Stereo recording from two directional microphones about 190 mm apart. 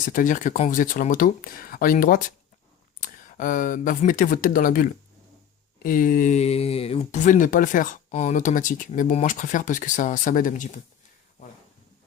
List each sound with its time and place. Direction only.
0.0 s speech: 45° left (ahead or behind)